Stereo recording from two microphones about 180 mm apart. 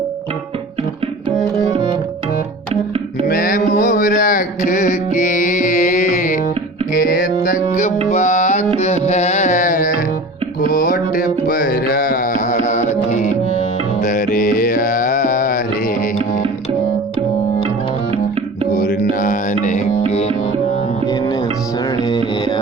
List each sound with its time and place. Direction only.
1.7 s music: 30° right (ahead or behind)
3.2 s a sound: 50° left (ahead or behind)
6.9 s music: 50° left (ahead or behind)
8.8 s carnatic music: 40° left (ahead or behind)
10.6 s music: 50° left (ahead or behind)
18.8 s music: 50° left (ahead or behind); by 20.3 s 35° left (ahead or behind)